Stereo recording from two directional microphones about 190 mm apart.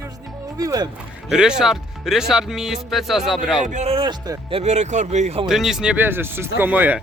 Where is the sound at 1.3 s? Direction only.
5° right (ahead or behind).